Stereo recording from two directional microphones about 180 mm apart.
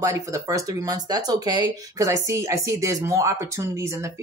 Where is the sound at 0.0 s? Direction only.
15° right (ahead or behind).